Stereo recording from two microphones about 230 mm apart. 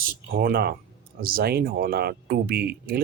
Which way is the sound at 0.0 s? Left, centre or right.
Right.